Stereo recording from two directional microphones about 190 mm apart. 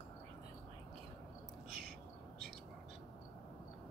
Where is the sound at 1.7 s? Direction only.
50° right (ahead or behind).